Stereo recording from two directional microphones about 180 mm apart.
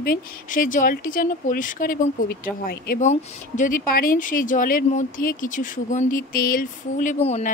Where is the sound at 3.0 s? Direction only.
40° left (ahead or behind).